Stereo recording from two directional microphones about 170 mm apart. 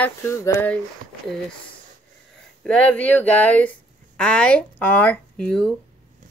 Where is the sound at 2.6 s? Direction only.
5° left (ahead or behind).